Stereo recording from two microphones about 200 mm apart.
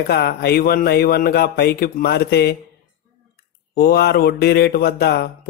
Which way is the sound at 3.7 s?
55° left (ahead or behind).